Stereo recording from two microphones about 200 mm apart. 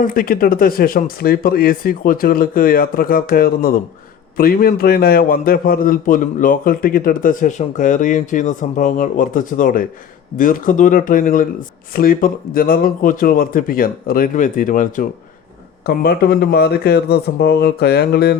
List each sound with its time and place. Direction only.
0.0 s a man's voice: 45° left (ahead or behind)